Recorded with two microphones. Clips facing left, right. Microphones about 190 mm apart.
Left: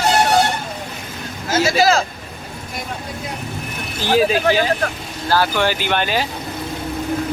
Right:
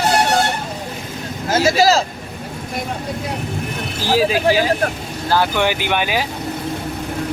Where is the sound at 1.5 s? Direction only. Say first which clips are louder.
Right 1 dB; 35° right (ahead or behind).